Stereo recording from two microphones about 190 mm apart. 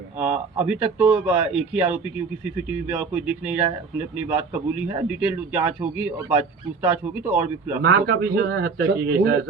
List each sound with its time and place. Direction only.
0.2 s speech: 10° right (ahead or behind)
7.8 s a man's voice: 55° right (ahead or behind)